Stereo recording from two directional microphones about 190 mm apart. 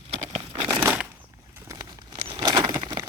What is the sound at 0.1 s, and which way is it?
Crumpling, 25° right (ahead or behind).